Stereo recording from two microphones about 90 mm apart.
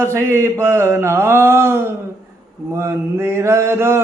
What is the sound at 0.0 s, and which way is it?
Mantra, 30° right (ahead or behind).